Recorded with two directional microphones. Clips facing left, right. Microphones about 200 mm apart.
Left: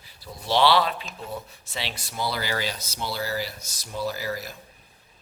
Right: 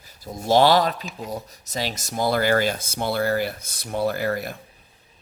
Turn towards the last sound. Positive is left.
turn(degrees=-60)  # may be behind; listen again after turning